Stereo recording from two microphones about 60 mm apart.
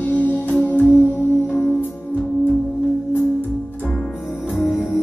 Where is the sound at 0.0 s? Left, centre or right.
Left.